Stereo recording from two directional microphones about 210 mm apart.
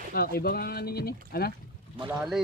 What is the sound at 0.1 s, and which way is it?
Speech, 45° left (ahead or behind).